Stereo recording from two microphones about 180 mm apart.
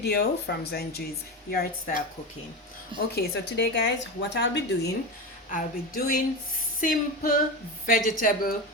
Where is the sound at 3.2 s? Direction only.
70° left (ahead or behind).